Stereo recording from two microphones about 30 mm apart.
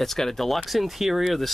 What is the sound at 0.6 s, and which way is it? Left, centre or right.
Speech, centre.